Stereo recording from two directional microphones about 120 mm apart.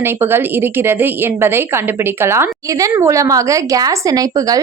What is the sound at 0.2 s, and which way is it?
A woman's voice, 20° right (ahead or behind).